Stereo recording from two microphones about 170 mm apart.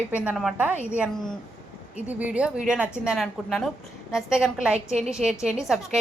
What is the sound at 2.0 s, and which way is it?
A woman's voice, 10° right (ahead or behind).